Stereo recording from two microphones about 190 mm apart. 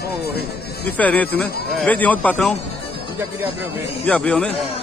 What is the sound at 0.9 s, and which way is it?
Speech, 10° left (ahead or behind).